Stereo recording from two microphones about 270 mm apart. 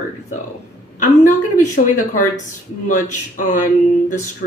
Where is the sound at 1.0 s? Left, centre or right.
Left.